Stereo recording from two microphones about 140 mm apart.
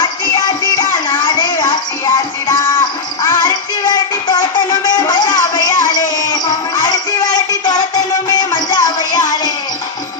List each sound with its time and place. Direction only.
0.0 s music: 30° left (ahead or behind)